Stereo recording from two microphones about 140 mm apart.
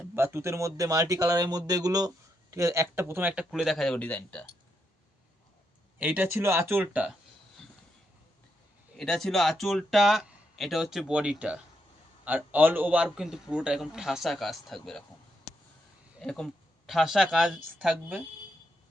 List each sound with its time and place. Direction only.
0.2 s speech: 20° right (ahead or behind)
3.5 s speech: centre (ahead or behind)
6.0 s speech: 10° right (ahead or behind)
9.0 s speech: 5° left (ahead or behind)
16.2 s speech: 5° left (ahead or behind)